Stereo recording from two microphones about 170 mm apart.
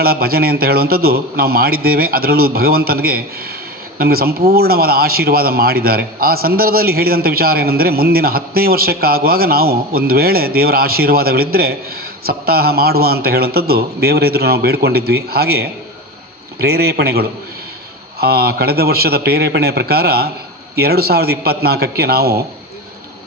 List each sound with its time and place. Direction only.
0.0 s a man's voice: 65° right (ahead or behind)